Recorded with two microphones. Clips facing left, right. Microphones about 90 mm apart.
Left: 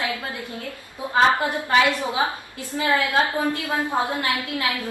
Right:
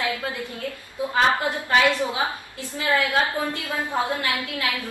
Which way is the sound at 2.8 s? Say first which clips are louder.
Left 1 dB; 20° left (ahead or behind).